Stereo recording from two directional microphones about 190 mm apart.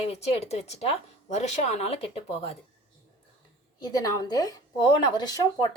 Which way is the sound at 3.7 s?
20° left (ahead or behind).